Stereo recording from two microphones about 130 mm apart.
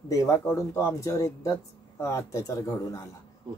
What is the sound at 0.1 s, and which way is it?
Speech, 25° left (ahead or behind).